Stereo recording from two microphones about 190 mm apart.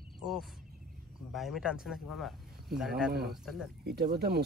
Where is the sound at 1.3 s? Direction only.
Centre (ahead or behind).